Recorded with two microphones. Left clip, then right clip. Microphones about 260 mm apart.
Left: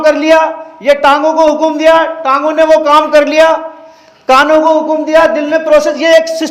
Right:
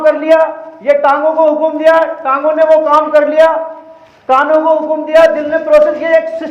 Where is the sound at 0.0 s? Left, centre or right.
Left.